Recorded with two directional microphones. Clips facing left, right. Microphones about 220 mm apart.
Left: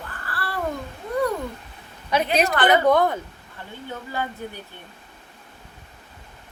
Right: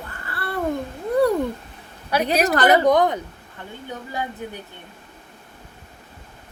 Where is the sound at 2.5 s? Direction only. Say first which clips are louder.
Right 4 dB; 40° right (ahead or behind).